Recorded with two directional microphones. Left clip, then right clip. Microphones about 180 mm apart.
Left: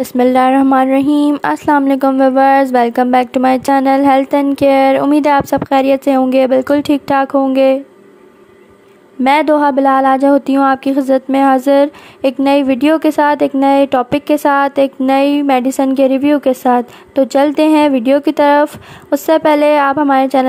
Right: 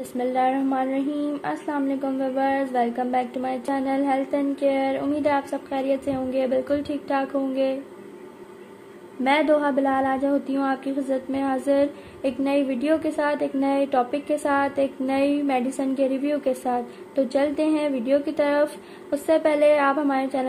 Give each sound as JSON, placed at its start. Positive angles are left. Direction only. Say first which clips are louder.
{"t": 0.2, "sound": "speech", "louder": "left 12 dB", "side_deg": 45}
{"t": 9.2, "sound": "speech", "louder": "left 10 dB", "side_deg": 40}